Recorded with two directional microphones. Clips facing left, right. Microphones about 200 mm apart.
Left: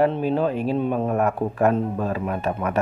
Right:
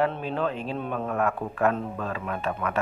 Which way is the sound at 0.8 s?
35° left (ahead or behind).